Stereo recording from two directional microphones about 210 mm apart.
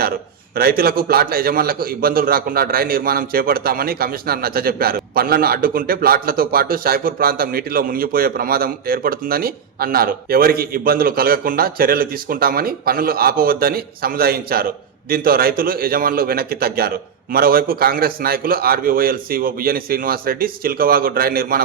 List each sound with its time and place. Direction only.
0.5 s a man's voice: 45° right (ahead or behind)